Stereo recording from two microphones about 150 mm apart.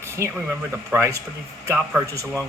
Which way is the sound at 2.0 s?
20° right (ahead or behind).